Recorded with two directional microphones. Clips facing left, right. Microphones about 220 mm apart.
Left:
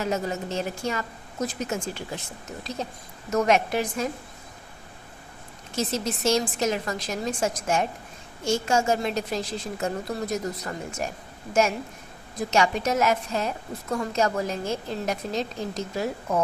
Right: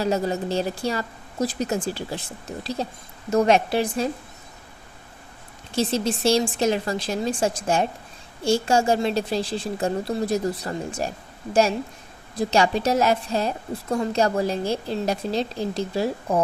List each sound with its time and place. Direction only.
0.0 s a woman's voice: 35° right (ahead or behind)
5.7 s a woman's voice: 30° right (ahead or behind)
12.4 s a woman's voice: 30° right (ahead or behind)